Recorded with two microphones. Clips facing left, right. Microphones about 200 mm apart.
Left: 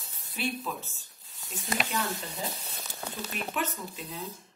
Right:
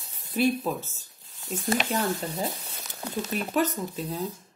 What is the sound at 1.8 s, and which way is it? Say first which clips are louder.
Speech: right 6 dB; 40° right (ahead or behind).